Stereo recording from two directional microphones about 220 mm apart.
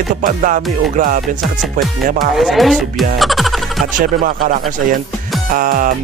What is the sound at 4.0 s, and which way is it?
Music, 40° right (ahead or behind).